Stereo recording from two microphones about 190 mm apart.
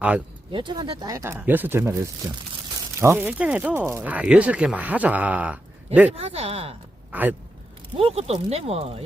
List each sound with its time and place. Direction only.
0.5 s speech: 25° right (ahead or behind)
3.0 s speech: 10° right (ahead or behind)
6.1 s speech: 30° right (ahead or behind)
7.1 s speech: 10° right (ahead or behind)
7.9 s speech: 30° right (ahead or behind)